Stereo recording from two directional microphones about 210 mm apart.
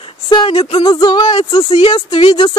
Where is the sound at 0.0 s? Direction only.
25° left (ahead or behind).